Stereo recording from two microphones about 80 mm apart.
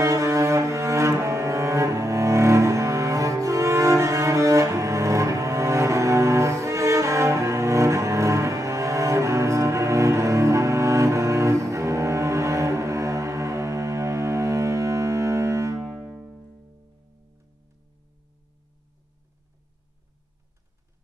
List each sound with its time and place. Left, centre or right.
0.0 s cello: right
16.0 s music: centre